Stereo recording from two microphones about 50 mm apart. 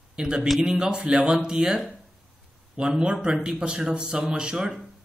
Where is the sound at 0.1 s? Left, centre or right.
Centre.